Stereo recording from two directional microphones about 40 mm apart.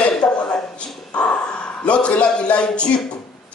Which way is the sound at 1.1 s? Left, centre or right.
Left.